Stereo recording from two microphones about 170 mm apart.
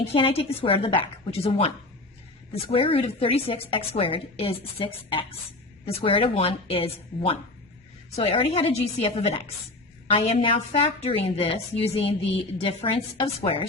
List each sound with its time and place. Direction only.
0.0 s a woman's voice: 35° left (ahead or behind)